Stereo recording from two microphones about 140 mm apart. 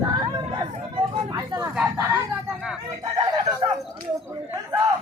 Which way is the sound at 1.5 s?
10° right (ahead or behind).